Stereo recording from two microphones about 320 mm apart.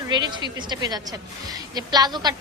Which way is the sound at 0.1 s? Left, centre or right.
Centre.